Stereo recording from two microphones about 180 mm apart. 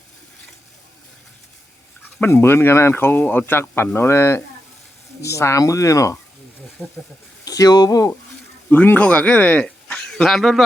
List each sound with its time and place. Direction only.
2.1 s speech: 10° left (ahead or behind)
6.8 s speech: centre (ahead or behind)
7.4 s speech: 20° left (ahead or behind); by 10.6 s centre (ahead or behind)